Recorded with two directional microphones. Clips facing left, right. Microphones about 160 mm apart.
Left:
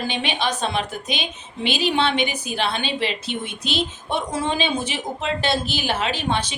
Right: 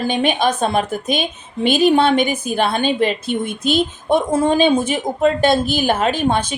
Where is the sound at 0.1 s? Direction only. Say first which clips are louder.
Right 7 dB; 45° right (ahead or behind).